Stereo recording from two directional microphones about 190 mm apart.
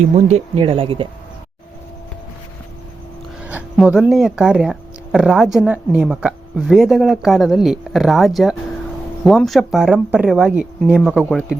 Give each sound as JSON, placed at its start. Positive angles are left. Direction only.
{"t": 0.2, "sound": "speech", "side_deg": -35}
{"t": 3.4, "sound": "speech", "side_deg": -10}